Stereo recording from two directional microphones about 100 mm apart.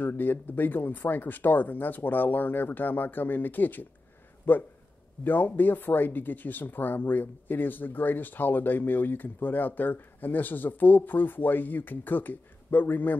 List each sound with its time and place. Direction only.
0.0 s speech: 20° left (ahead or behind)